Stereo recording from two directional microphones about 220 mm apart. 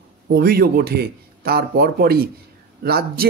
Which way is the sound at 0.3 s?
45° right (ahead or behind).